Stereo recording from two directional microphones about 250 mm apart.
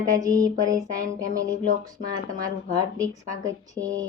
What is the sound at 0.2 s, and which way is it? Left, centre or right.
Speech, centre.